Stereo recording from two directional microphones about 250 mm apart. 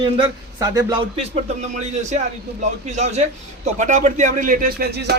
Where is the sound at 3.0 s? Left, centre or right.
Right.